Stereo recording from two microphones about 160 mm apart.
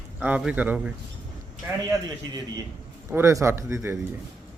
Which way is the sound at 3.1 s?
15° right (ahead or behind).